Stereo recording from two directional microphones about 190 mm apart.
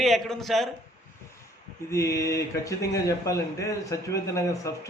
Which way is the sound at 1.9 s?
15° left (ahead or behind).